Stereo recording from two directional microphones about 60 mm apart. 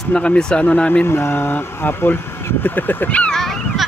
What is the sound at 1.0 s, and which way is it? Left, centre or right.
Speech, left.